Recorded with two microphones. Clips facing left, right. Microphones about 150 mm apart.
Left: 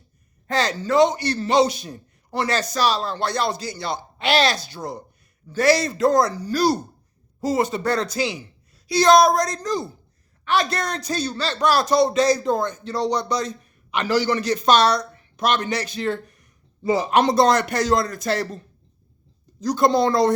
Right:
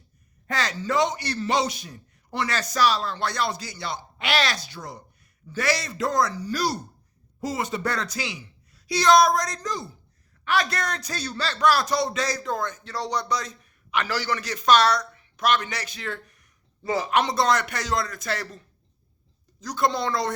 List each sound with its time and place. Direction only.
0.4 s a man's voice: 30° left (ahead or behind)
17.2 s speech: 35° left (ahead or behind)